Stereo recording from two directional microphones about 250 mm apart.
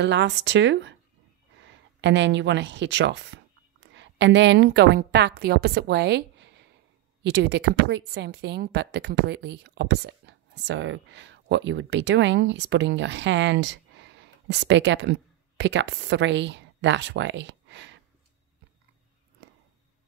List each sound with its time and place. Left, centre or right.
0.0 s speech: right
2.0 s a woman's voice: right